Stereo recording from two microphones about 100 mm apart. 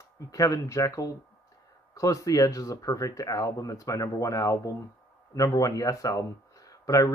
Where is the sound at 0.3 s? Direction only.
35° left (ahead or behind).